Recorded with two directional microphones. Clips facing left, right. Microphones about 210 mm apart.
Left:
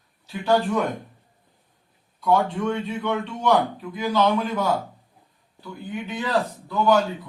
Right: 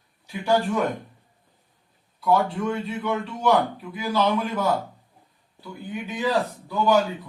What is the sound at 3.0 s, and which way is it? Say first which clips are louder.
A man's voice: right 2 dB; 5° right (ahead or behind).